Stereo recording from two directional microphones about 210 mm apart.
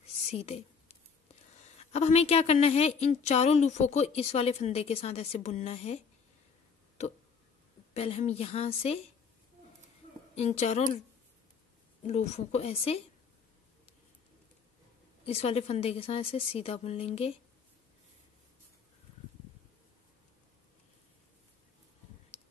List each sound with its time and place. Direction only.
0.3 s a sound: 30° left (ahead or behind)
1.6 s a woman's voice: 30° left (ahead or behind)
7.9 s a woman's voice: 30° left (ahead or behind)
10.3 s a woman's voice: 30° left (ahead or behind)
12.1 s a woman's voice: 30° left (ahead or behind)
15.2 s a woman's voice: 30° left (ahead or behind)
22.3 s tick: 30° left (ahead or behind)